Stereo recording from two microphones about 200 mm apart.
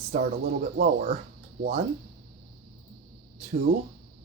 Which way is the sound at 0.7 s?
40° right (ahead or behind).